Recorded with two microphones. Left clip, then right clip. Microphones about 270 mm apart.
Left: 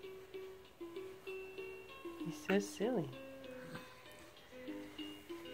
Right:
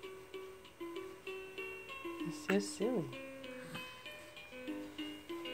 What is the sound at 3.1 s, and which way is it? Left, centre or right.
Music, right.